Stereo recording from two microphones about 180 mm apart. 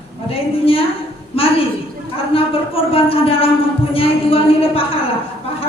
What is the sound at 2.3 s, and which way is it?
Speech, 30° left (ahead or behind).